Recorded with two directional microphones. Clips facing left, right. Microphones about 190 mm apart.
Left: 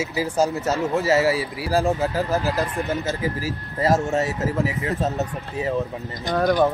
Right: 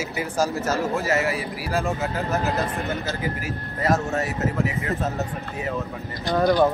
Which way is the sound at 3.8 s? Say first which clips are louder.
Left 3 dB; 25° left (ahead or behind).